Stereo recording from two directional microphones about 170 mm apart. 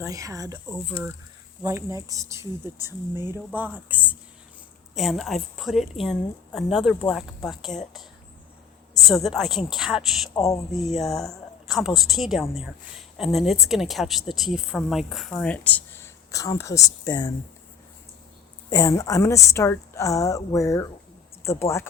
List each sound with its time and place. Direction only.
0.0 s speech: 20° right (ahead or behind); by 7.8 s centre (ahead or behind)
9.0 s speech: centre (ahead or behind); by 17.3 s 20° left (ahead or behind)
18.7 s speech: 20° left (ahead or behind)